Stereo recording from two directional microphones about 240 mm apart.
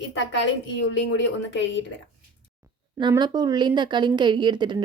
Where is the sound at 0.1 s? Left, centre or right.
Left.